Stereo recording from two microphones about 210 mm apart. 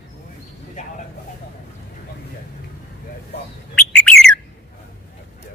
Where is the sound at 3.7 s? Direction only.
5° left (ahead or behind).